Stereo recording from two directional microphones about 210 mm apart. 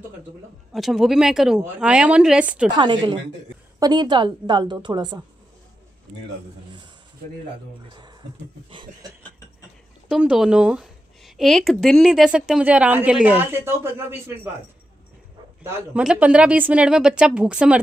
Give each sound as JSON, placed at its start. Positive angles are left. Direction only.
{"t": 0.7, "sound": "a woman's voice", "side_deg": 0}
{"t": 2.8, "sound": "a woman's voice", "side_deg": -20}
{"t": 10.0, "sound": "a woman's voice", "side_deg": -5}
{"t": 15.6, "sound": "a woman's voice", "side_deg": -10}